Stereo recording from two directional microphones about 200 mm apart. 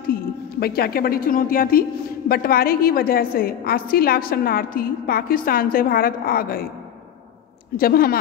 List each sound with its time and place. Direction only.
0.0 s a woman's voice: 50° left (ahead or behind)
7.7 s a woman's voice: 45° left (ahead or behind)